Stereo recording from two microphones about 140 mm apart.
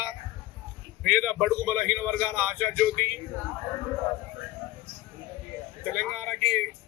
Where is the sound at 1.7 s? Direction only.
25° left (ahead or behind).